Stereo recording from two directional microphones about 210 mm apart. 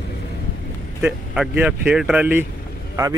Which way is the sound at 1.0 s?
5° right (ahead or behind).